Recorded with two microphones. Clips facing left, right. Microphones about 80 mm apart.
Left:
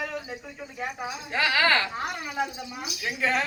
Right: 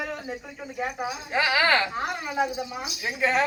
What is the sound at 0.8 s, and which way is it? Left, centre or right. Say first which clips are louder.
A woman's voice: right 3 dB; centre.